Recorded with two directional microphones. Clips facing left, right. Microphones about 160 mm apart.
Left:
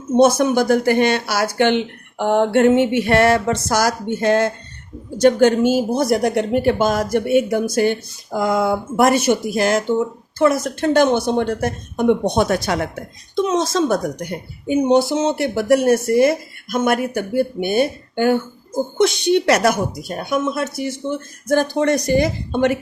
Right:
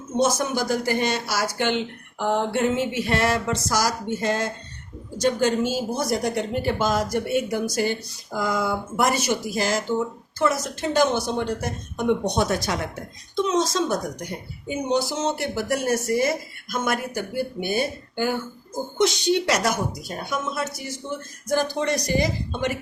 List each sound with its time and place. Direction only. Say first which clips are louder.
0.2 s a woman's voice: left 8 dB; 60° left (ahead or behind)